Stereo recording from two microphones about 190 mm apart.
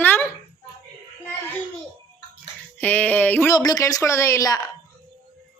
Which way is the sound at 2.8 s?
10° left (ahead or behind).